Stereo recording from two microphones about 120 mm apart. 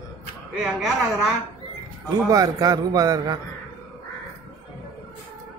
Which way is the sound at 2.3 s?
30° right (ahead or behind).